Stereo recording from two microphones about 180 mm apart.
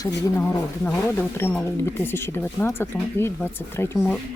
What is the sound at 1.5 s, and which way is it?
Speech, 10° left (ahead or behind).